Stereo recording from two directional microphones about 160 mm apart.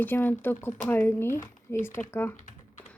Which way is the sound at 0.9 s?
15° left (ahead or behind).